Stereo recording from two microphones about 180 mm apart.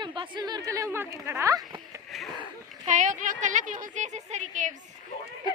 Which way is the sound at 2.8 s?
40° right (ahead or behind).